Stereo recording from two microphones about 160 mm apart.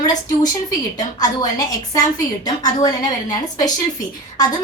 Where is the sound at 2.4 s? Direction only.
25° left (ahead or behind).